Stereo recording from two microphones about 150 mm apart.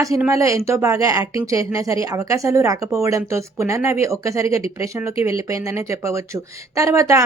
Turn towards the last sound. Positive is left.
turn(degrees=-20)  # may be behind; listen again after turning